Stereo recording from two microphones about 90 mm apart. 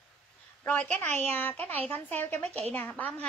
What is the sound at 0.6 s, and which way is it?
A woman's voice, 15° left (ahead or behind).